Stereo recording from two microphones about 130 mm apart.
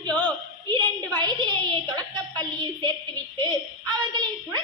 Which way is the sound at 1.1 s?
35° right (ahead or behind).